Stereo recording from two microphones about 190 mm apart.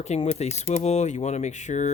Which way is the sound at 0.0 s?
35° left (ahead or behind).